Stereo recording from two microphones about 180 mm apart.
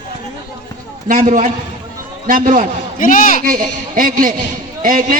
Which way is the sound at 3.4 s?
50° right (ahead or behind).